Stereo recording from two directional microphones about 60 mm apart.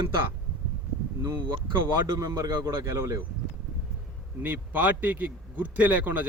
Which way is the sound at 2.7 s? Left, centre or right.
Right.